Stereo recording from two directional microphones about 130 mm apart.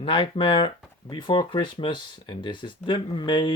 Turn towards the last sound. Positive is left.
turn(degrees=40)  # may be behind; listen again after turning